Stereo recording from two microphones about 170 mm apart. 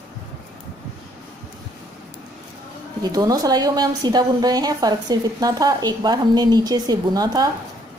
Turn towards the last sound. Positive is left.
turn(degrees=-25)  # may be behind; listen again after turning